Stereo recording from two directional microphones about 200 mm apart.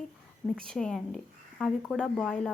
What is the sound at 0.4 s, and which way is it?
Speech, 5° left (ahead or behind).